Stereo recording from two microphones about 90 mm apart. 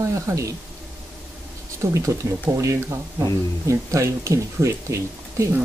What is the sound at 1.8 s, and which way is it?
Speech, 35° right (ahead or behind).